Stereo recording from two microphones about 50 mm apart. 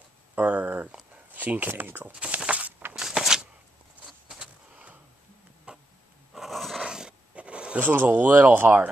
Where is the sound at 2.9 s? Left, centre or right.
Centre.